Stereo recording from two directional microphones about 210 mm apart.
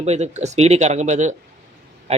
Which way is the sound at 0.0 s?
30° right (ahead or behind).